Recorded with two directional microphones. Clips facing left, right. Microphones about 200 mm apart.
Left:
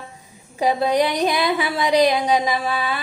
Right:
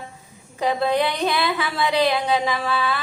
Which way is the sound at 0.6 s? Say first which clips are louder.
Left 2 dB; 15° left (ahead or behind).